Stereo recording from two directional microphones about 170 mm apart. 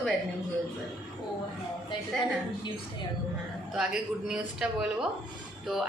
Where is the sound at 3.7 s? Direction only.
5° right (ahead or behind).